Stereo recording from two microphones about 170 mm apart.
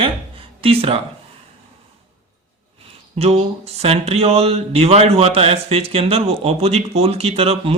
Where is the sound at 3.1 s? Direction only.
35° right (ahead or behind).